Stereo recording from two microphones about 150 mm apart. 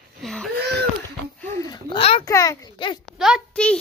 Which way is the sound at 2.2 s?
20° left (ahead or behind).